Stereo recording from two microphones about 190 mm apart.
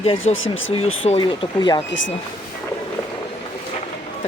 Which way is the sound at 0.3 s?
90° left.